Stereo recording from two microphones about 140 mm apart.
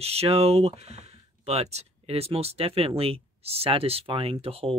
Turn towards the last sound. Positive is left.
turn(degrees=-45)  # may be behind; listen again after turning